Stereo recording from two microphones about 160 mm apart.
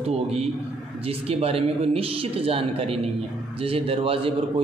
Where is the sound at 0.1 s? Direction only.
40° right (ahead or behind).